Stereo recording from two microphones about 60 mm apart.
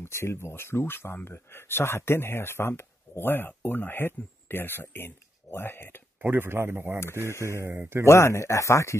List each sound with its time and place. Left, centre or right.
0.0 s speech: left
6.2 s speech: right
7.3 s speech: left